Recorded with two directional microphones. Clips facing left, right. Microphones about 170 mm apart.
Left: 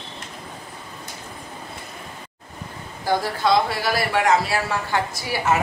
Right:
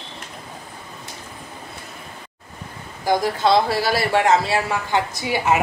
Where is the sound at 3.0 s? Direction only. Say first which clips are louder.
Right 3 dB; 15° right (ahead or behind).